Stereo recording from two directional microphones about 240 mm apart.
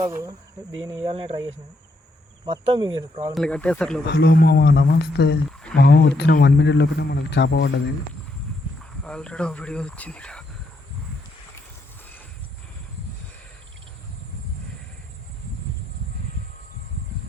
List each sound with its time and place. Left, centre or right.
0.0 s cricket: centre
1.0 s speech: right
3.3 s speech: centre
4.0 s speech: left
9.0 s speech: centre